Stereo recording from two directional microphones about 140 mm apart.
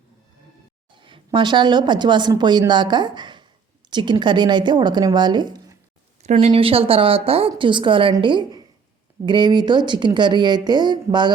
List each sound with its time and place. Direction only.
1.0 s a woman's voice: 35° right (ahead or behind)
6.4 s a woman's voice: 40° right (ahead or behind)